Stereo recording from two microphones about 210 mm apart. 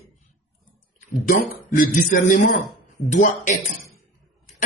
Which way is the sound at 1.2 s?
40° left (ahead or behind).